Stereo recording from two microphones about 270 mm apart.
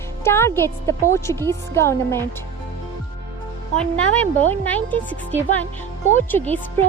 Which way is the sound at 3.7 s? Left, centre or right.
Centre.